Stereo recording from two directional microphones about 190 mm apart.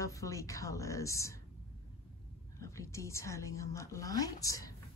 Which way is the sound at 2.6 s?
15° left (ahead or behind).